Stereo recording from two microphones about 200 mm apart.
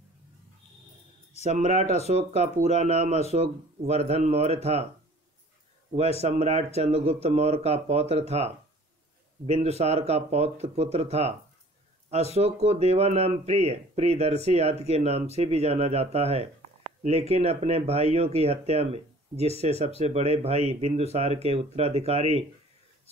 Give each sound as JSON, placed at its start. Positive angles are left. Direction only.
{"t": 1.4, "sound": "speech", "side_deg": -35}
{"t": 5.9, "sound": "speech", "side_deg": -30}